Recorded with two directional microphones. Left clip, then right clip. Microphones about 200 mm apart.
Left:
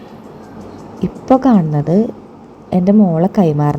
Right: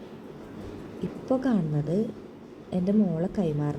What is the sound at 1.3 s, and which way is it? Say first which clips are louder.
A woman's voice: left 15 dB; 30° left (ahead or behind).